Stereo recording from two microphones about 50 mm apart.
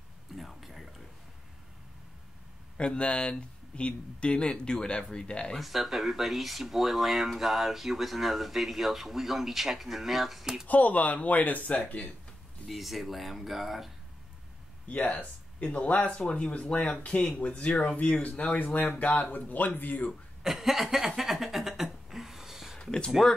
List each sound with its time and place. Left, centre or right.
0.4 s a sound: centre
2.8 s speech: left
5.6 s speech: centre
10.7 s speech: left
12.6 s speech: centre
14.9 s speech: left
20.4 s speech: centre
21.2 s a sound: centre
22.8 s a sound: centre